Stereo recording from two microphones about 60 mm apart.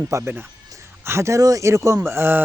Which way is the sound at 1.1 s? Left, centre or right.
Right.